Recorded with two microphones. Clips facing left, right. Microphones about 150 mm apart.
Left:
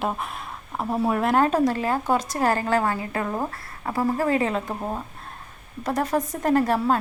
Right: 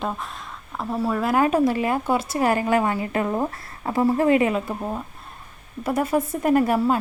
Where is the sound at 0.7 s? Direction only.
20° left (ahead or behind).